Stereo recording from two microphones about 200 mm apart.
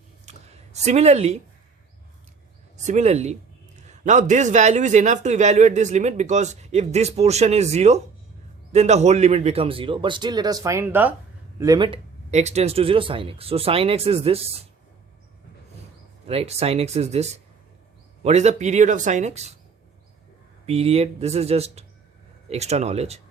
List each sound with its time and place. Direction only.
0.3 s a sound: 35° right (ahead or behind)
2.7 s a man's voice: 35° right (ahead or behind)
12.3 s speech: 35° right (ahead or behind)
16.2 s a man's voice: 30° right (ahead or behind)
20.7 s a man's voice: 30° right (ahead or behind)